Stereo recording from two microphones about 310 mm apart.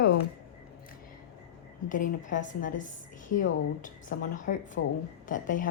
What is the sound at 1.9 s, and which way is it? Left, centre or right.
A woman's voice, left.